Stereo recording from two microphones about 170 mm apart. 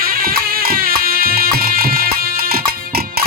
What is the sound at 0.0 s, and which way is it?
Music, 60° right (ahead or behind).